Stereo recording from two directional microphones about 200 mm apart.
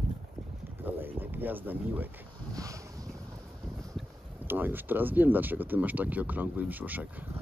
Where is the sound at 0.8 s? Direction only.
10° right (ahead or behind).